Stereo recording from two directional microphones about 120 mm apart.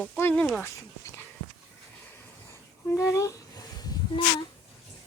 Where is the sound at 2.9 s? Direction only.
25° left (ahead or behind).